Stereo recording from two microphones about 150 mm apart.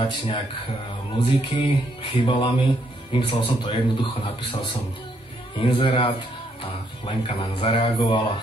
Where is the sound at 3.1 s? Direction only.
35° left (ahead or behind).